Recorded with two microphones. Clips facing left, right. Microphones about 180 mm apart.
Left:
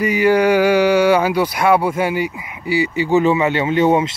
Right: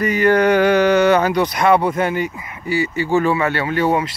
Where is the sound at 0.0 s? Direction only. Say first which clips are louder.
Left 1 dB; 10° left (ahead or behind).